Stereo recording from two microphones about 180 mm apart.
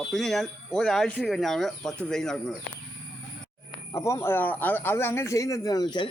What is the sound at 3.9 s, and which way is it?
Speech, 15° left (ahead or behind).